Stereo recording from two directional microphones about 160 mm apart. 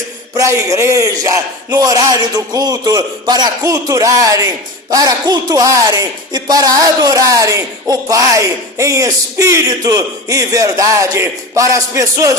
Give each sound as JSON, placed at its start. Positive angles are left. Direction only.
{"t": 0.3, "sound": "speech", "side_deg": -20}